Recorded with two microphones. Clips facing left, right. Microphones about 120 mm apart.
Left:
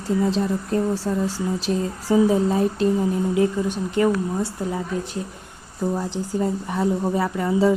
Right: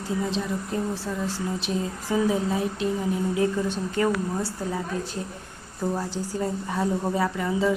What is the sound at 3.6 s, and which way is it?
Speech, 15° left (ahead or behind).